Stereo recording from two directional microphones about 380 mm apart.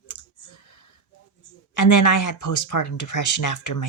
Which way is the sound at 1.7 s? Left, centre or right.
Left.